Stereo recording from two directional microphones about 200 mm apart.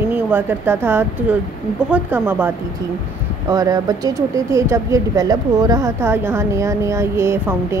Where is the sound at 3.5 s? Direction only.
20° right (ahead or behind).